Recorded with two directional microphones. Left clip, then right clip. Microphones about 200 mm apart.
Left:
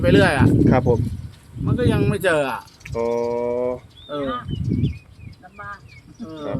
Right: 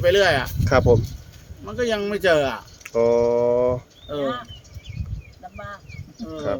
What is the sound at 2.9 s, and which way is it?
Speech, 15° right (ahead or behind).